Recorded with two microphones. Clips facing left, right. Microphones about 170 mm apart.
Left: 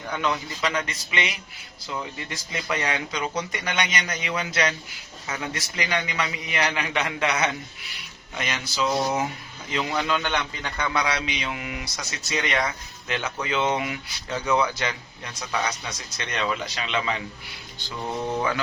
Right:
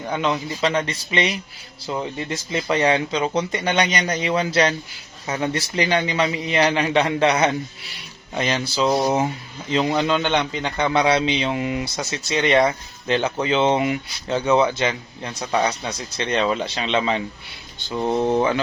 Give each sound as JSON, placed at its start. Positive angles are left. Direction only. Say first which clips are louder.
{"t": 0.0, "sound": "speech", "louder": "right 4 dB", "side_deg": -25}
{"t": 18.3, "sound": "speech", "louder": "right 7 dB", "side_deg": -25}